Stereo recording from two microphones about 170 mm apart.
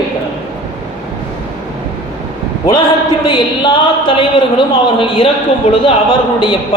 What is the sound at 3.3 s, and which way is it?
A man's voice, 30° left (ahead or behind).